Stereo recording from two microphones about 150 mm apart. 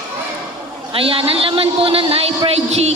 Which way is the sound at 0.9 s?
40° right (ahead or behind).